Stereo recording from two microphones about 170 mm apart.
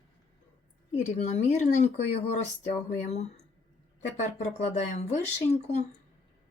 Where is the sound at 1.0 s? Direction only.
40° left (ahead or behind).